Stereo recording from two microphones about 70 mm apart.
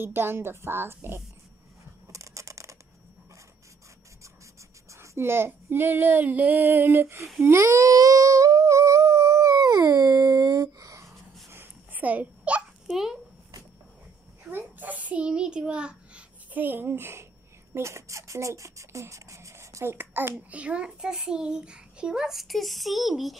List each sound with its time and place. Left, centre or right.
0.0 s child singing: right
2.1 s a sound: right
4.9 s child singing: right
7.8 s humming: right
11.5 s babbling: right
12.8 s hiccup: centre
14.5 s a sound: right
17.7 s speech: right; by 23.3 s centre